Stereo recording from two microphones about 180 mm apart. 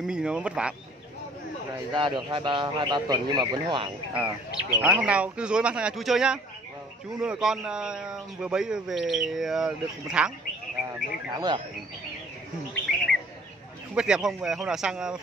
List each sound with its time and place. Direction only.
0.0 s speech: 5° right (ahead or behind)
1.9 s speech: 25° right (ahead or behind)
4.1 s speech: 5° right (ahead or behind)
11.3 s speech: 25° right (ahead or behind)
13.9 s speech: 5° right (ahead or behind)